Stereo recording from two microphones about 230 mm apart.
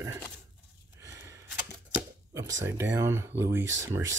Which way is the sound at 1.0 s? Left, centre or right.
Centre.